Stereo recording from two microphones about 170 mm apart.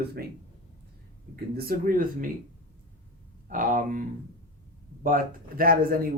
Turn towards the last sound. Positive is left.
turn(degrees=-60)  # may be behind; listen again after turning